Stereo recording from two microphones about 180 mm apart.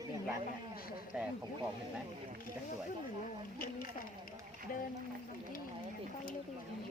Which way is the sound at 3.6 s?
50° left (ahead or behind).